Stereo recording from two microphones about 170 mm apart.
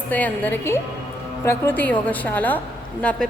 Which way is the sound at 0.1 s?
10° left (ahead or behind).